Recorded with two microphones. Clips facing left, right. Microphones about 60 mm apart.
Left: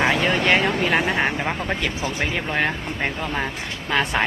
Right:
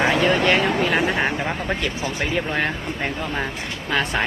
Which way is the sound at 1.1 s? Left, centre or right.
Centre.